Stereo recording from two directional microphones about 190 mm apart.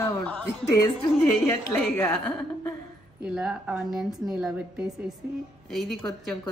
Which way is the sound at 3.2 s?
5° right (ahead or behind).